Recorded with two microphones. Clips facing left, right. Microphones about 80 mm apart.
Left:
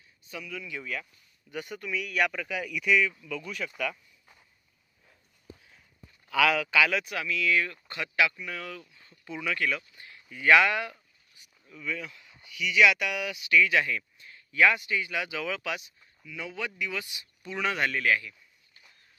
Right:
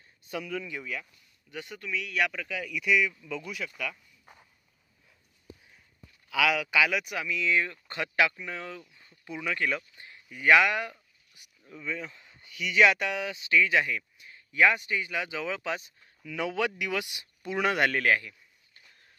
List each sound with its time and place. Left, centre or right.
0.3 s speech: right
1.5 s speech: centre
6.3 s speech: centre; by 7.8 s right
7.9 s speech: right
8.4 s speech: right
9.7 s a sound: right
10.3 s speech: centre
11.6 s speech: right
12.4 s speech: right
16.3 s speech: right